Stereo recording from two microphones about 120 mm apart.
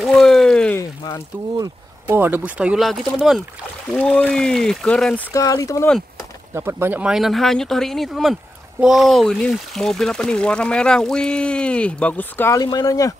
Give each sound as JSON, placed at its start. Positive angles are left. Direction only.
{"t": 0.0, "sound": "a sound", "side_deg": 5}
{"t": 2.0, "sound": "speech", "side_deg": -15}
{"t": 3.9, "sound": "speech", "side_deg": 10}
{"t": 5.3, "sound": "speech", "side_deg": 30}
{"t": 6.5, "sound": "speech", "side_deg": -20}
{"t": 12.5, "sound": "speech", "side_deg": 30}